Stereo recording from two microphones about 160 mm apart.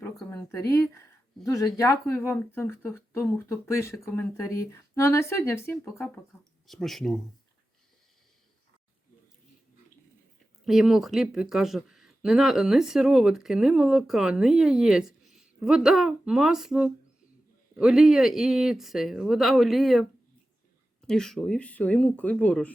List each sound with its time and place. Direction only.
0.3 s speech: 15° left (ahead or behind)
6.7 s speech: centre (ahead or behind)
10.7 s speech: centre (ahead or behind)